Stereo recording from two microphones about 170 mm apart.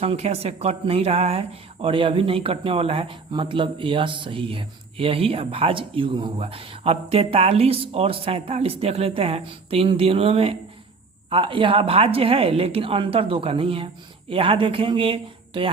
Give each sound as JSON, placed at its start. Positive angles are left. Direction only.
{"t": 0.0, "sound": "speech", "side_deg": -35}